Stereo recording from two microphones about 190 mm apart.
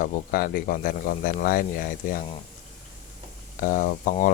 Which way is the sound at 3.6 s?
45° left (ahead or behind).